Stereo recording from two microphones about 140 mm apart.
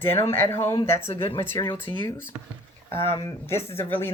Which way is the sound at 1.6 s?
25° left (ahead or behind).